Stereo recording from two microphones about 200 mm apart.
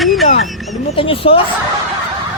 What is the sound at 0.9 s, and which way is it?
Speech, 25° left (ahead or behind).